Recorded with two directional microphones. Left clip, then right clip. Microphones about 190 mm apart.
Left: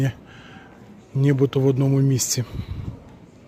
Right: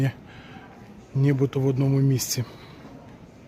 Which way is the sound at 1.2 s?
20° left (ahead or behind).